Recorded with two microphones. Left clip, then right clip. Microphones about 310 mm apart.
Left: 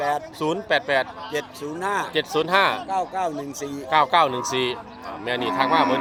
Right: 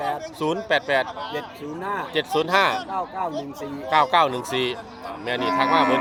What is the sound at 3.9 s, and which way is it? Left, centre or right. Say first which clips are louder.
Speech: even; centre.